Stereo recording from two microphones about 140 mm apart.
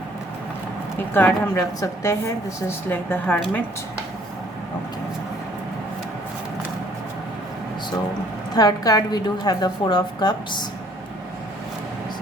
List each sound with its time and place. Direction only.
0.9 s a woman's voice: 15° left (ahead or behind)
8.5 s a woman's voice: 25° left (ahead or behind)